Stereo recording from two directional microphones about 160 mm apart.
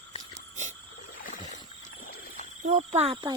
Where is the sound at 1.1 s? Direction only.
55° left (ahead or behind).